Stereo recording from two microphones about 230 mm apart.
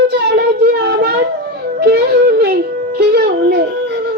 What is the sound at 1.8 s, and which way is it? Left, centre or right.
Whimper, right.